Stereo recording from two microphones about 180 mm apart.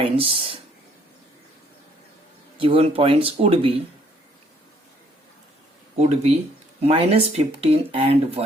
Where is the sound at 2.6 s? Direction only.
30° right (ahead or behind).